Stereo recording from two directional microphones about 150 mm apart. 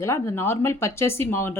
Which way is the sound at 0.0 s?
15° left (ahead or behind).